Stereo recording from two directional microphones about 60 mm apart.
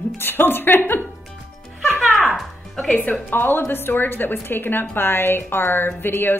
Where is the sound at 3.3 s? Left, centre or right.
Left.